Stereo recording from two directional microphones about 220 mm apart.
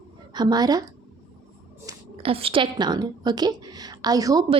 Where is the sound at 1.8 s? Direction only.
25° right (ahead or behind).